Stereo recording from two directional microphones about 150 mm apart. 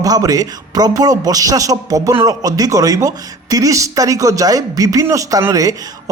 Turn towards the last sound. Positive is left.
turn(degrees=-20)  # may be behind; listen again after turning